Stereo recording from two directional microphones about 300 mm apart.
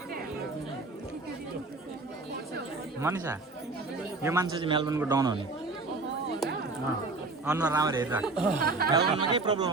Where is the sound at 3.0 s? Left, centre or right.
Centre.